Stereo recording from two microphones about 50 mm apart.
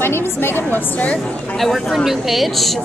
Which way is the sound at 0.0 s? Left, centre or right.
Left.